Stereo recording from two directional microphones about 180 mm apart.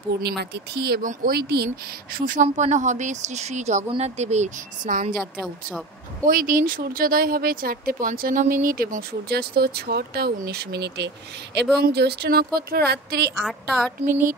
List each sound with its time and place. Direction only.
0.4 s speech: 65° right (ahead or behind)
2.1 s speech: 50° right (ahead or behind)
5.1 s a woman's voice: 5° right (ahead or behind)
6.2 s speech: 50° right (ahead or behind)
13.4 s a woman's voice: centre (ahead or behind)